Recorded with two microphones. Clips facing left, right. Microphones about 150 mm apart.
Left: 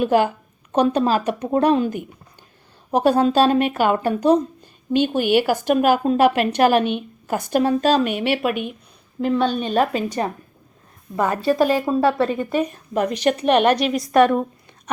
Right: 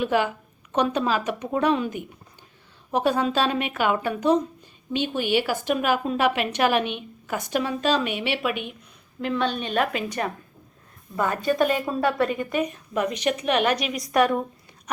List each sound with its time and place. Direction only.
0.0 s a woman's voice: 40° left (ahead or behind)